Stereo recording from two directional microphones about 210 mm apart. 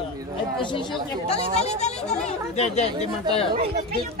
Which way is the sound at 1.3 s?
30° left (ahead or behind).